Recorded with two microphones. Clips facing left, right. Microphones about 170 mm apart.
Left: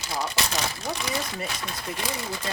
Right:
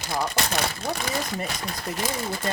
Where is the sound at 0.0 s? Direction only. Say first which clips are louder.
Right 2 dB; 55° right (ahead or behind).